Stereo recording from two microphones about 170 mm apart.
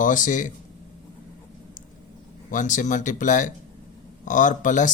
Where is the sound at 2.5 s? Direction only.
50° left (ahead or behind).